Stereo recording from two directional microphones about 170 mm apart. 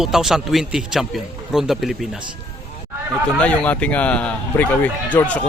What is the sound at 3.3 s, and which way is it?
Speech, 5° left (ahead or behind).